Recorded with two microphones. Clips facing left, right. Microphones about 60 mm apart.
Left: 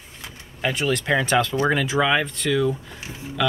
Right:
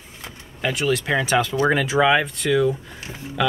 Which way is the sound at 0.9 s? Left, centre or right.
Centre.